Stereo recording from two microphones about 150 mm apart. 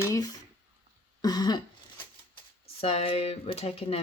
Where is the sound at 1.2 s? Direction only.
25° left (ahead or behind).